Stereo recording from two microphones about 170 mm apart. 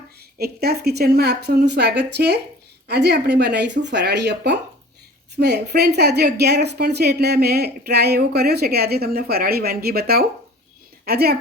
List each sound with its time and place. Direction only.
0.3 s a woman's voice: 65° right (ahead or behind)